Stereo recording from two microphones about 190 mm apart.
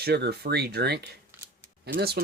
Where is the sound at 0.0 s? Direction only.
60° right (ahead or behind).